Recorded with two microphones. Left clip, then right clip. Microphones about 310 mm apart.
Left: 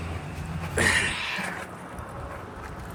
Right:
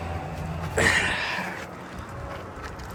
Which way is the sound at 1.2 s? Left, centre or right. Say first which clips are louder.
Right 2 dB; right.